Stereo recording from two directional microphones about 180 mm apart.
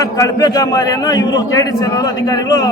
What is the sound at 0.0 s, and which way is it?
A man's voice, 20° left (ahead or behind).